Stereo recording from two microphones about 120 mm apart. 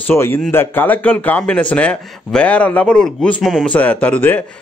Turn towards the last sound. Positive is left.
turn(degrees=15)  # may be behind; listen again after turning